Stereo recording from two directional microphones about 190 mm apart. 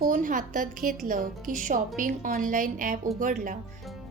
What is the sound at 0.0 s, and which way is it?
Speech, 45° right (ahead or behind).